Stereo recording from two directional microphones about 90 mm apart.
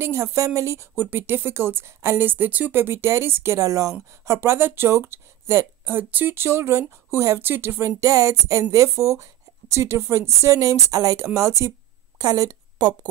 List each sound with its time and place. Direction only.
0.0 s speech: 30° right (ahead or behind)
0.9 s a woman's voice: 25° right (ahead or behind); by 3.9 s 40° right (ahead or behind)
4.3 s speech: 30° right (ahead or behind)
12.2 s a sound: 45° right (ahead or behind)